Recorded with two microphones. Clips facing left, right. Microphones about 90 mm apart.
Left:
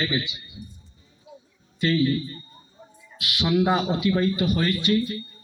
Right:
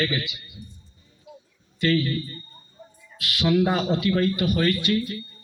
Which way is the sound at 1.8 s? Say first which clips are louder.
Left 1 dB; 20° left (ahead or behind).